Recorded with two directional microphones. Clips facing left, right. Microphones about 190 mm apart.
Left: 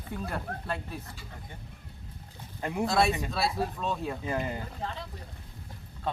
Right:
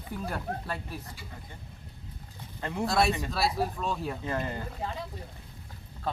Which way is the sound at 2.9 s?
Centre (ahead or behind).